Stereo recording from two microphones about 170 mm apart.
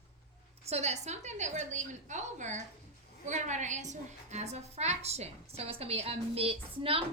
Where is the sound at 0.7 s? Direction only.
40° right (ahead or behind).